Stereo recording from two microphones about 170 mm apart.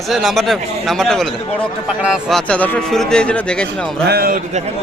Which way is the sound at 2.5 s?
10° left (ahead or behind).